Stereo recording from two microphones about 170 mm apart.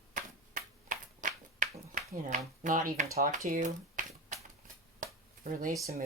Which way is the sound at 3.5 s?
50° right (ahead or behind).